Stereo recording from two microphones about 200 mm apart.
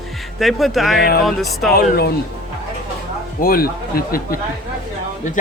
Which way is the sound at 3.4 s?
50° left (ahead or behind).